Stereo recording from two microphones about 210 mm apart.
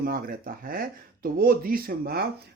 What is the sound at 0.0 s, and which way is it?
Speech, 45° right (ahead or behind).